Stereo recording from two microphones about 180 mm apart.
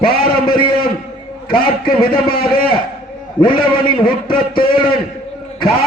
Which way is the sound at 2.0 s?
25° left (ahead or behind).